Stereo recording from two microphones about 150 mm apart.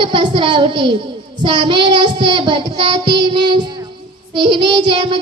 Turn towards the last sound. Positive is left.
turn(degrees=-30)  # may be behind; listen again after turning